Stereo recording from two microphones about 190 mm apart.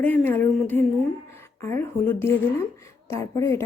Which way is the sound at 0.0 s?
10° left (ahead or behind).